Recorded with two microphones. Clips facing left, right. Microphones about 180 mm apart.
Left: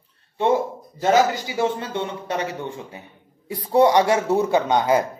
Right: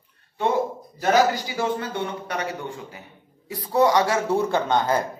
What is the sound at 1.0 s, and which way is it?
A man's voice, 20° left (ahead or behind).